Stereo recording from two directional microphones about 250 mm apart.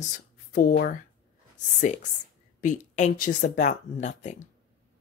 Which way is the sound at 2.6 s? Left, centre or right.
Left.